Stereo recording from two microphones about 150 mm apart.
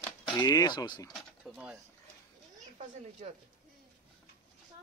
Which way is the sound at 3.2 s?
50° right (ahead or behind).